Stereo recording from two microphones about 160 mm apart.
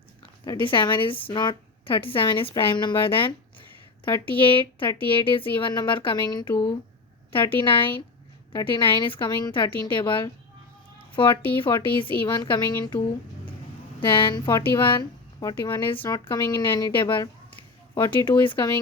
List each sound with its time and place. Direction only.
0.4 s a woman's voice: 30° left (ahead or behind)
7.5 s a woman's voice: 35° left (ahead or behind)
14.0 s speech: 30° left (ahead or behind)